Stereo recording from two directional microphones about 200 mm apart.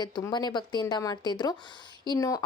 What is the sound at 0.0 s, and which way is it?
Speech, 20° left (ahead or behind).